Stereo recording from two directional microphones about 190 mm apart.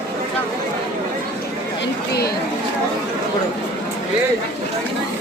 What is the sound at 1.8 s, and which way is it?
Chatter, 55° left (ahead or behind).